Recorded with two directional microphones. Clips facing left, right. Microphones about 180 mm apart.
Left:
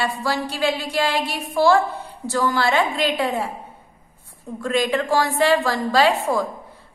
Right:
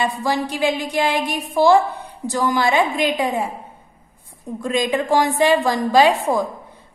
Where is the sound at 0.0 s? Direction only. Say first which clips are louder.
Right 3 dB; 20° right (ahead or behind).